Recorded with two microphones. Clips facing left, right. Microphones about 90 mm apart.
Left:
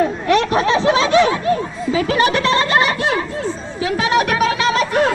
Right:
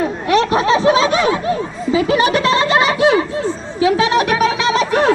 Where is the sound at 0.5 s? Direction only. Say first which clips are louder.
Right 2 dB; 15° right (ahead or behind).